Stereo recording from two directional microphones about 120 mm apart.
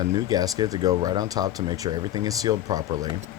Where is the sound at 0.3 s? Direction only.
30° right (ahead or behind).